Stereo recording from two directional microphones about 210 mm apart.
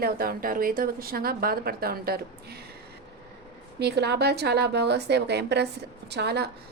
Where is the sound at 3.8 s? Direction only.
50° right (ahead or behind).